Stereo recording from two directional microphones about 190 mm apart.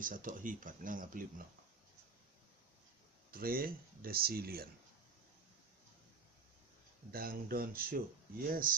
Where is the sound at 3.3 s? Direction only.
50° right (ahead or behind).